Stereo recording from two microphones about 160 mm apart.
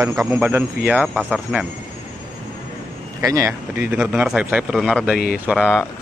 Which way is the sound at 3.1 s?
20° right (ahead or behind).